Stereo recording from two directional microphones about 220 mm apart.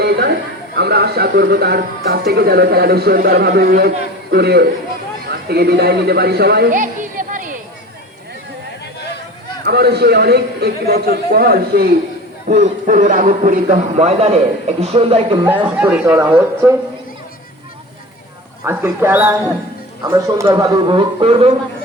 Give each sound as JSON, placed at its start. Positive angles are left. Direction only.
{"t": 0.0, "sound": "a sound", "side_deg": -50}
{"t": 0.8, "sound": "speech", "side_deg": -45}
{"t": 9.6, "sound": "speech", "side_deg": -50}
{"t": 12.5, "sound": "a man's voice", "side_deg": -35}
{"t": 15.6, "sound": "speech", "side_deg": -5}
{"t": 18.6, "sound": "speech", "side_deg": -10}